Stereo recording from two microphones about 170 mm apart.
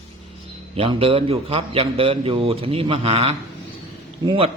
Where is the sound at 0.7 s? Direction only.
35° right (ahead or behind).